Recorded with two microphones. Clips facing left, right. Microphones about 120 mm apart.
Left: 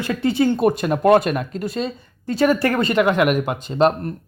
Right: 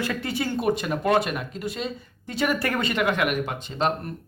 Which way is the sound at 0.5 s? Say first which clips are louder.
Left 6 dB; 45° left (ahead or behind).